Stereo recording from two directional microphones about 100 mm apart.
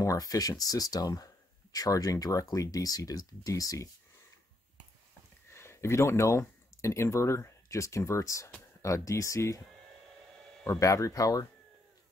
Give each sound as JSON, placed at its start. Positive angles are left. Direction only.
{"t": 0.0, "sound": "speech", "side_deg": 35}
{"t": 5.5, "sound": "speech", "side_deg": 25}
{"t": 10.7, "sound": "speech", "side_deg": 35}